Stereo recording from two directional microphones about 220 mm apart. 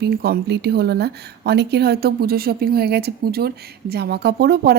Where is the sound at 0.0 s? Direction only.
45° right (ahead or behind).